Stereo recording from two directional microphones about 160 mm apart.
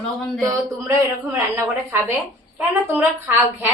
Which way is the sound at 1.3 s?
15° right (ahead or behind).